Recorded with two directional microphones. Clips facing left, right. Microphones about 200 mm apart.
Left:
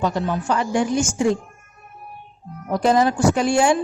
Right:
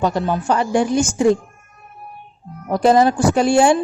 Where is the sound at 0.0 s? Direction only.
35° right (ahead or behind).